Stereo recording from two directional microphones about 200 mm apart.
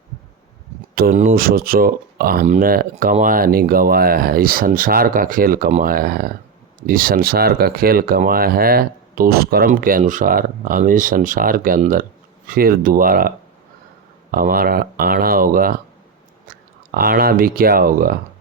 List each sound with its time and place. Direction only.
0.9 s speech: 45° right (ahead or behind)